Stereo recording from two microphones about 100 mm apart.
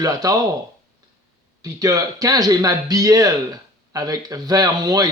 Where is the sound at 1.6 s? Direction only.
35° right (ahead or behind).